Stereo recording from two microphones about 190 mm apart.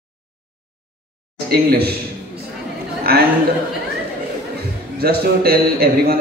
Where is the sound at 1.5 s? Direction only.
55° right (ahead or behind).